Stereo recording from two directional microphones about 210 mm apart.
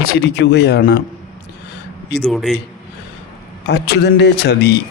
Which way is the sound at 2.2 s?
Centre (ahead or behind).